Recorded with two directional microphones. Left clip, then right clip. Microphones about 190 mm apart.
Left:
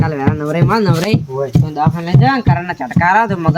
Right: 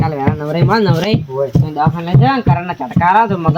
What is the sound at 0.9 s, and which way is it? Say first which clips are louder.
Speech: right 1 dB; 15° left (ahead or behind).